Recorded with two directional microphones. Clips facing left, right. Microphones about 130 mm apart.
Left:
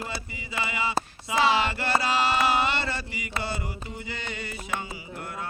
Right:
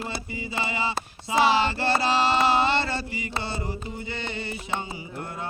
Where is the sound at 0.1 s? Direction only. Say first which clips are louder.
Right 3 dB; 30° right (ahead or behind).